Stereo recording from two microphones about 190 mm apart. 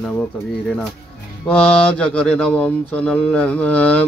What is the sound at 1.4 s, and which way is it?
Mantra, 5° left (ahead or behind).